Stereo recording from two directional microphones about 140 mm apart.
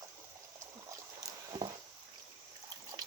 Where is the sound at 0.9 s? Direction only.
25° right (ahead or behind).